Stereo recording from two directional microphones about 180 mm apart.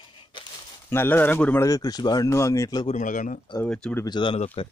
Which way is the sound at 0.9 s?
10° left (ahead or behind).